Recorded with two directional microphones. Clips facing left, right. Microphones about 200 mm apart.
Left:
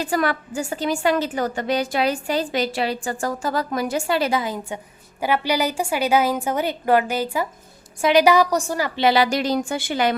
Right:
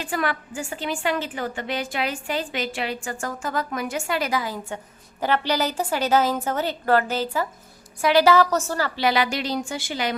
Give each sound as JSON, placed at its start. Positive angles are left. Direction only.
{"t": 0.0, "sound": "a woman's voice", "side_deg": 40}
{"t": 9.0, "sound": "speech", "side_deg": 35}